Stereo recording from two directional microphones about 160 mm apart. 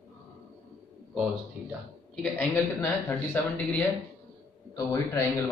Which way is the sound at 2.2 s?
10° left (ahead or behind).